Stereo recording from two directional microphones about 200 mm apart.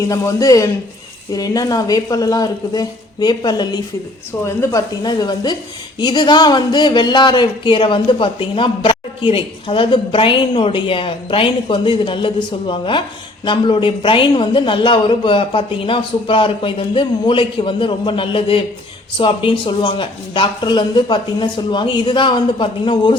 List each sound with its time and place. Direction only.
0.1 s speech: 15° left (ahead or behind)